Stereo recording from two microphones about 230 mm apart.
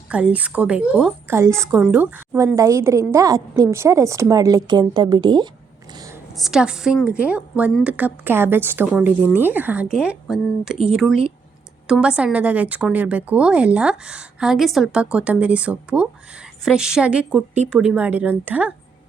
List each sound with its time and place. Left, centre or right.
0.1 s a woman's voice: centre
5.9 s a sound: centre
6.3 s a woman's voice: centre